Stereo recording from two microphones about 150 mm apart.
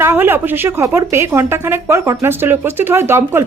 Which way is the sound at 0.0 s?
15° right (ahead or behind).